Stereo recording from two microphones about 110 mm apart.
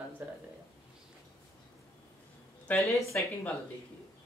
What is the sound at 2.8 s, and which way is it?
Speech, centre (ahead or behind).